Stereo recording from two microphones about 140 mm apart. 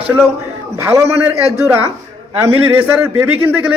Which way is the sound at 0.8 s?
20° right (ahead or behind).